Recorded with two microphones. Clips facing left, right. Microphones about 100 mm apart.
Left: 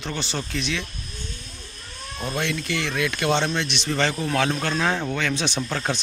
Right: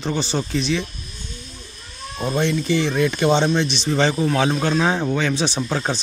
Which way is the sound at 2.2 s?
20° right (ahead or behind).